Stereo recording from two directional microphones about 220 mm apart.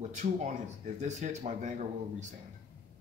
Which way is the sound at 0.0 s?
30° right (ahead or behind).